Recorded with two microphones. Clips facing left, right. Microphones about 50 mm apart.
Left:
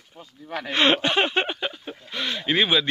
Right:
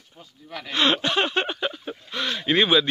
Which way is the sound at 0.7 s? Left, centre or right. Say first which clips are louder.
Left 1 dB; left.